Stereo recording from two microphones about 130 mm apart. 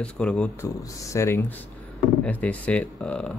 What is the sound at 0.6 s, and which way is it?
Speech, 25° left (ahead or behind).